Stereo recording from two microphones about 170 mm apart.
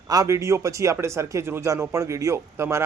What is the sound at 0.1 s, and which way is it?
Speech, 20° right (ahead or behind).